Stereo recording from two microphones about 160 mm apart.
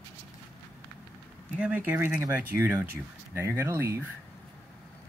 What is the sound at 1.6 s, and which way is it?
Speech, 10° right (ahead or behind).